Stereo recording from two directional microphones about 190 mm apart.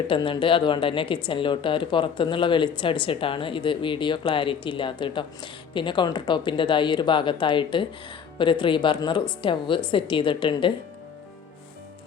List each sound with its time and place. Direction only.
0.1 s speech: 25° left (ahead or behind)